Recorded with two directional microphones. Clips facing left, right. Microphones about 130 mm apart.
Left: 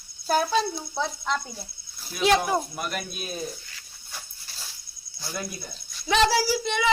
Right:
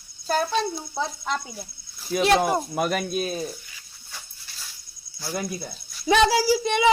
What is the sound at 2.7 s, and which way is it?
Speech, 90° right.